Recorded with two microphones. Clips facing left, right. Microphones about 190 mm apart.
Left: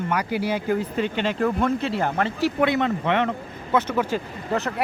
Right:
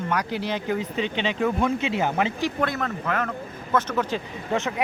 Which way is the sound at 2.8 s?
20° left (ahead or behind).